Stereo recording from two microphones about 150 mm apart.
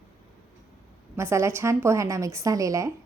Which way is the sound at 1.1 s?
20° right (ahead or behind).